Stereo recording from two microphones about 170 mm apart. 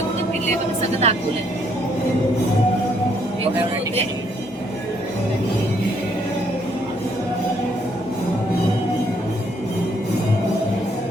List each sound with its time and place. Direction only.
1.0 s speech: 40° right (ahead or behind)